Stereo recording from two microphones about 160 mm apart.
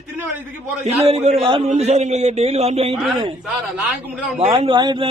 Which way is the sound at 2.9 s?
Centre (ahead or behind).